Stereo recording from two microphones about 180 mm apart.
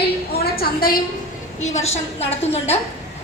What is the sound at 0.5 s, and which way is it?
Speech, 55° left (ahead or behind).